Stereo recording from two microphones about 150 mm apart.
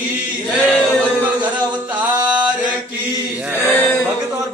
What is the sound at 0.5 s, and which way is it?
Chant, 5° right (ahead or behind).